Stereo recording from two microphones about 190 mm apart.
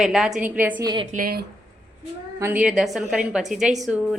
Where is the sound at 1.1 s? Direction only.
50° right (ahead or behind).